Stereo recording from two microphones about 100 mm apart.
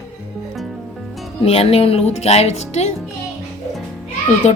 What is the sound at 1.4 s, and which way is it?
Speech, 75° left (ahead or behind).